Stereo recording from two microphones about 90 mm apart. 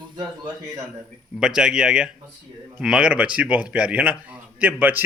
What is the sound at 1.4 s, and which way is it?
A man's voice, 10° right (ahead or behind).